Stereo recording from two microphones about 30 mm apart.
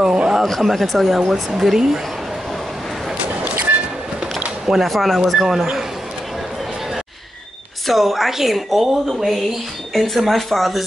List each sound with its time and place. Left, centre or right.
0.0 s a sound: right
0.6 s a woman's voice: centre
4.6 s a woman's voice: centre
7.8 s a woman's voice: centre